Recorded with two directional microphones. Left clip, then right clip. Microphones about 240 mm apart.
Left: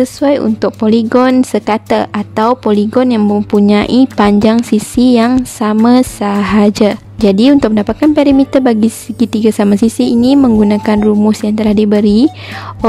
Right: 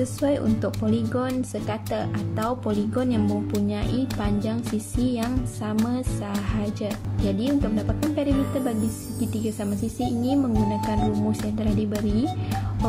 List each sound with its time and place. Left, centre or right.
0.0 s speech: left